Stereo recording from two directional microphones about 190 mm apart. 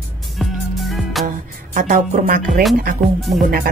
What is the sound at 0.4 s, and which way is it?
Music, centre (ahead or behind).